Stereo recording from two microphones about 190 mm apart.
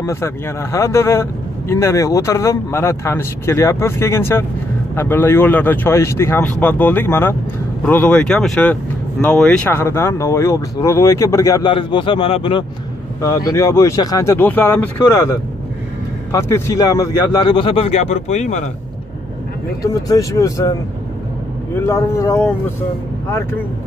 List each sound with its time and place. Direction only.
0.0 s speech: 15° left (ahead or behind)
13.5 s speech: 15° left (ahead or behind); by 18.7 s 35° left (ahead or behind)
19.8 s speech: 20° left (ahead or behind)
21.7 s speech: 15° left (ahead or behind)